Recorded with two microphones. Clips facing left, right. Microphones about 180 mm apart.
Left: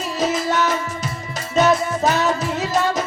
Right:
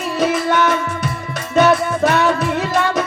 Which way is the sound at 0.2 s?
60° right (ahead or behind).